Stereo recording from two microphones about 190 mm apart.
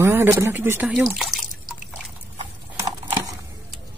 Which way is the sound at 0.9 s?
Centre (ahead or behind).